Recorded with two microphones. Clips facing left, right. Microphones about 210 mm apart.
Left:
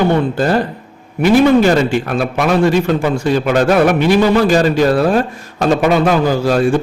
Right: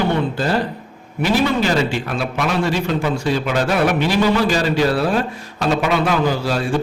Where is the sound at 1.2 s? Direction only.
50° left (ahead or behind).